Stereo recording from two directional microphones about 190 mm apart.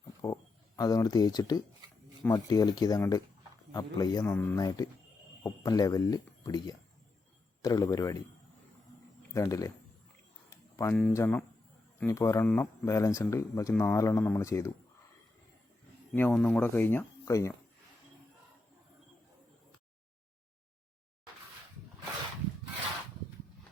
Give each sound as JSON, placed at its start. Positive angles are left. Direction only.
{"t": 0.0, "sound": "a sound", "side_deg": 20}
{"t": 0.8, "sound": "a man's voice", "side_deg": 20}
{"t": 9.3, "sound": "speech", "side_deg": 15}
{"t": 10.5, "sound": "a sound", "side_deg": 15}
{"t": 11.1, "sound": "speech", "side_deg": 10}
{"t": 16.1, "sound": "speech", "side_deg": 10}